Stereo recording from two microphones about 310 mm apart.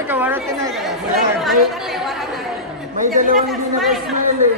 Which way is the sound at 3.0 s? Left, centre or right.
Right.